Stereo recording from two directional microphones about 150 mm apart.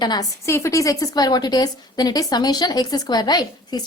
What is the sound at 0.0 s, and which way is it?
A woman's voice, 25° left (ahead or behind).